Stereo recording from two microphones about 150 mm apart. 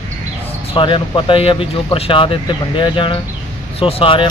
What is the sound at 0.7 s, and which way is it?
Speech, 35° left (ahead or behind).